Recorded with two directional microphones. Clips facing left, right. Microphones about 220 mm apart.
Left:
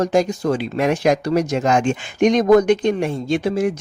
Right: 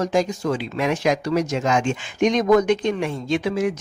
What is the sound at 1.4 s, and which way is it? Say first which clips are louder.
Speech: left 3 dB; 60° left (ahead or behind).